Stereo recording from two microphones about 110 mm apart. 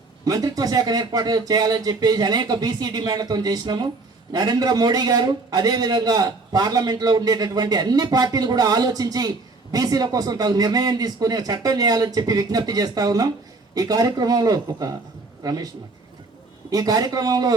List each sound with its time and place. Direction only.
0.3 s a man's voice: 35° right (ahead or behind)